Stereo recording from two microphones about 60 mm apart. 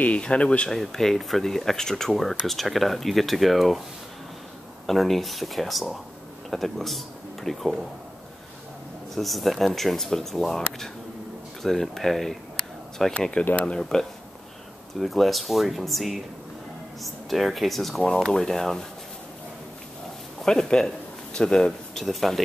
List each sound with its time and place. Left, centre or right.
0.0 s speech: centre
0.7 s speech: centre
4.8 s speech: centre
9.1 s speech: centre
13.2 s speech: centre
20.4 s speech: centre
22.0 s speech: centre